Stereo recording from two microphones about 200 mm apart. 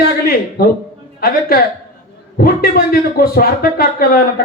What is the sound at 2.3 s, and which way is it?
A man's voice, 50° left (ahead or behind).